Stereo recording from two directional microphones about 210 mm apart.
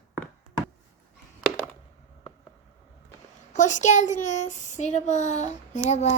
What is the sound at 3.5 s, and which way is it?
A child's voice, 35° left (ahead or behind).